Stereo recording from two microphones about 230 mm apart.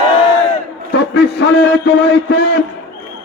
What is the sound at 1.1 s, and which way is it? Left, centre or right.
Speech, left.